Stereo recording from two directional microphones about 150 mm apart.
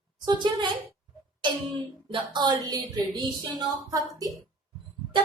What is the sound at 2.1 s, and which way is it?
A woman's voice, 30° right (ahead or behind).